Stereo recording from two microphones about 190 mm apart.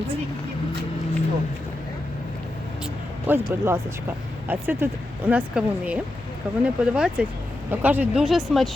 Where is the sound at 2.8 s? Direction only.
10° right (ahead or behind).